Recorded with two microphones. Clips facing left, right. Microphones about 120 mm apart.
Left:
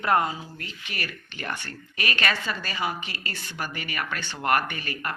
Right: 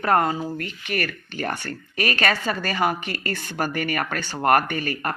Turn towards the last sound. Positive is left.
turn(degrees=-45)  # may be behind; listen again after turning